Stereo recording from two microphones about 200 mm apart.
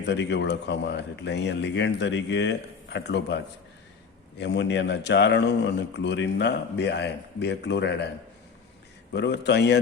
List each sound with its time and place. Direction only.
0.0 s a man's voice: 60° left (ahead or behind)
9.1 s a man's voice: 60° left (ahead or behind)